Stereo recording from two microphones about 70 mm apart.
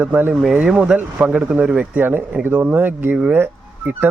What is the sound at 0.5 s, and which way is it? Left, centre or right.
Speech, centre.